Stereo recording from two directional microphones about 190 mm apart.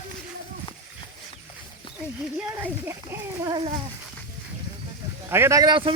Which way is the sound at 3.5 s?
25° right (ahead or behind).